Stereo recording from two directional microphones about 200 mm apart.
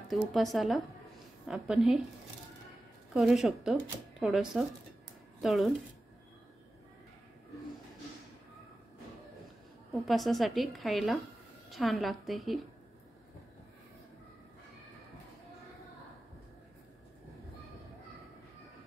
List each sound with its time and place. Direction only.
0.1 s a woman's voice: centre (ahead or behind)
3.1 s a woman's voice: centre (ahead or behind)
9.9 s a woman's voice: centre (ahead or behind)